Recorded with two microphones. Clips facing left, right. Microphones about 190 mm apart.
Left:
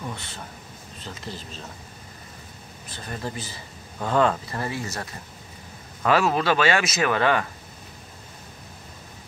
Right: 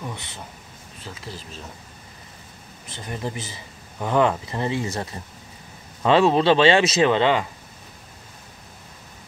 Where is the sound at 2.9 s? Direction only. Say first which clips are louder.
Right 2 dB; 20° right (ahead or behind).